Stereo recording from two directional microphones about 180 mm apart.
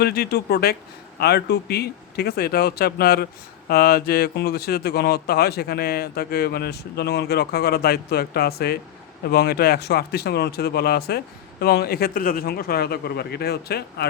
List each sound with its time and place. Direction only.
0.0 s speech: 60° left (ahead or behind)